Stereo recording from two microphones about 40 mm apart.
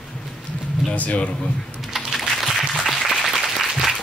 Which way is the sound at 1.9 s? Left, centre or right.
Centre.